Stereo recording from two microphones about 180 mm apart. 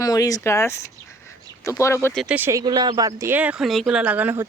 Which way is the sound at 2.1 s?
5° right (ahead or behind).